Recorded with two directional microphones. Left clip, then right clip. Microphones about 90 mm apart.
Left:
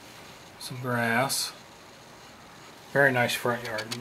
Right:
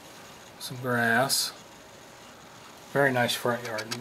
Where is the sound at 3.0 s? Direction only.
15° right (ahead or behind).